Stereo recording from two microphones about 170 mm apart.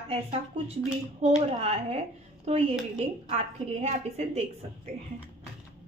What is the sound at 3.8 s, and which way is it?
Speech, 40° right (ahead or behind).